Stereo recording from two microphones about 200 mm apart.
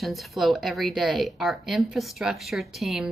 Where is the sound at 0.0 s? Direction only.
Centre (ahead or behind).